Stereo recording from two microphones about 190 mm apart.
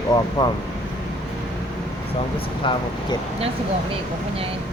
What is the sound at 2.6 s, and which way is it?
Speech, 25° left (ahead or behind).